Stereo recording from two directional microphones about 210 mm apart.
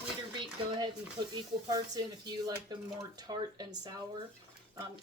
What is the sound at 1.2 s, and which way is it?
Speech, 20° right (ahead or behind).